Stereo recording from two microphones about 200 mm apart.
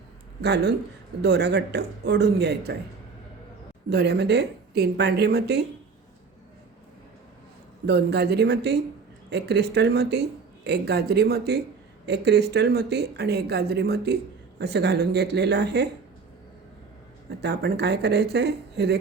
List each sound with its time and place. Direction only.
0.4 s speech: 60° right (ahead or behind)
3.8 s speech: 55° right (ahead or behind)
7.9 s speech: 55° right (ahead or behind)
17.4 s speech: 55° right (ahead or behind)